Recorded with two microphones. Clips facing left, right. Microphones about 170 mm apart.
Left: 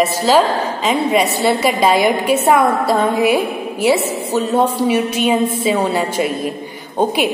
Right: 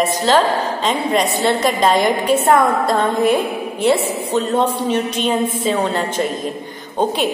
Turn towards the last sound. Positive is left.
turn(degrees=10)  # may be behind; listen again after turning